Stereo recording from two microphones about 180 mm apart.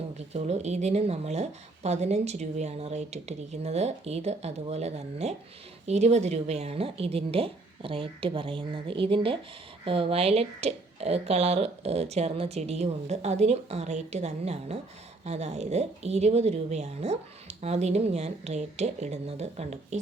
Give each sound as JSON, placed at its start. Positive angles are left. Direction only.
{"t": 0.3, "sound": "a woman's voice", "side_deg": -40}